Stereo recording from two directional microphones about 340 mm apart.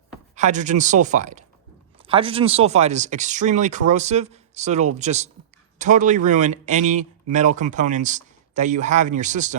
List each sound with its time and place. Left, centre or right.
0.3 s speech: right